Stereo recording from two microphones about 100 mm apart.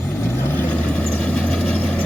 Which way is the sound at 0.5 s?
15° left (ahead or behind).